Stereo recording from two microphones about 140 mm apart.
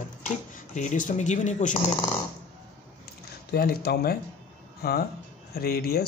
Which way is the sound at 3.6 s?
90° left.